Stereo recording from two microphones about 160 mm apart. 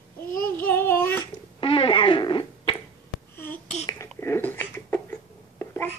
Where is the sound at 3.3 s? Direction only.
15° left (ahead or behind).